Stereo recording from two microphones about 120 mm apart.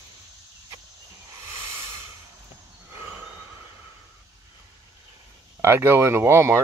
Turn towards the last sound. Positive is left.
turn(degrees=-20)  # may be behind; listen again after turning